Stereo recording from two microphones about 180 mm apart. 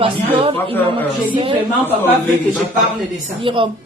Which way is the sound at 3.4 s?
30° right (ahead or behind).